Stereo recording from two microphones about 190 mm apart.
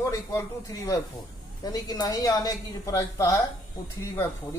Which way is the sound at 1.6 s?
20° left (ahead or behind).